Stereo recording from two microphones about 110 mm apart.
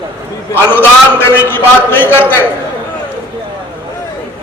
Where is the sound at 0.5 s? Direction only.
20° left (ahead or behind).